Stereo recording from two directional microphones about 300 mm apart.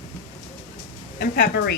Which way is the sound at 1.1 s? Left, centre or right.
Left.